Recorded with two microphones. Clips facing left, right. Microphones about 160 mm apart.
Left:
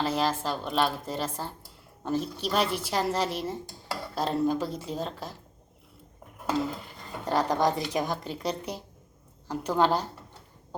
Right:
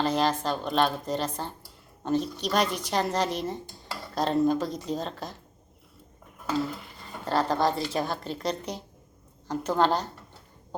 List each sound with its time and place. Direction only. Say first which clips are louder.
0.0 s a woman's voice: right 2 dB; 5° left (ahead or behind)
7.3 s speech: even; 15° left (ahead or behind)